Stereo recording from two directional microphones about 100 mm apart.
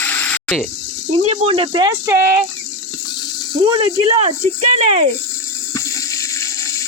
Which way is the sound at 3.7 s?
65° right (ahead or behind).